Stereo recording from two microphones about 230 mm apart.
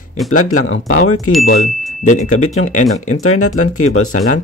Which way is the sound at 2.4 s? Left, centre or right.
Left.